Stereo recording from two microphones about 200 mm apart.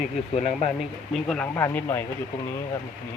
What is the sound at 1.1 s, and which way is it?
Speech, 5° left (ahead or behind).